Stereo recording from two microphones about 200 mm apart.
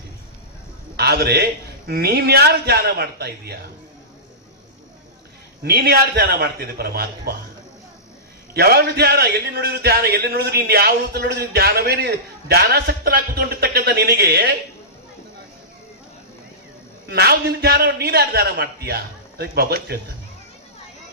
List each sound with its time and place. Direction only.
0.9 s a man's voice: 55° right (ahead or behind)
5.6 s a man's voice: 55° right (ahead or behind)
8.5 s a man's voice: 50° right (ahead or behind)
17.1 s a man's voice: 55° right (ahead or behind)